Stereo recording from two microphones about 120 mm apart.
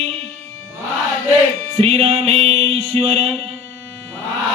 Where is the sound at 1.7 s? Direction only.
55° right (ahead or behind).